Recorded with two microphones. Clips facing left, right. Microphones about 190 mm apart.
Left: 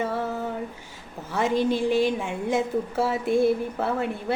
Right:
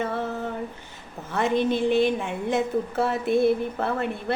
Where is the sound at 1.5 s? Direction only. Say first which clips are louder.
Even; 60° right (ahead or behind).